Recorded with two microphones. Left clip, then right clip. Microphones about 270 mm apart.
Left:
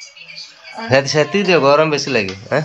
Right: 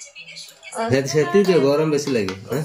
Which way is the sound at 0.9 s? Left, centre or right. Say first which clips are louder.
Left 5 dB; centre.